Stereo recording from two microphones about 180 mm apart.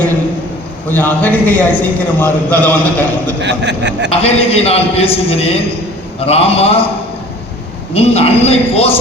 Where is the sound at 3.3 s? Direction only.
75° right (ahead or behind).